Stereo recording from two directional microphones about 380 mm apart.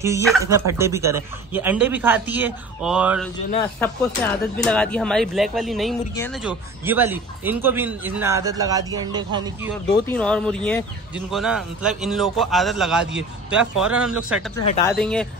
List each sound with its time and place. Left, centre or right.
0.0 s speech: centre
9.8 s speech: centre